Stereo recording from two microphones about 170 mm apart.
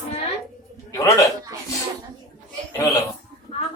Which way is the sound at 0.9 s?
20° left (ahead or behind).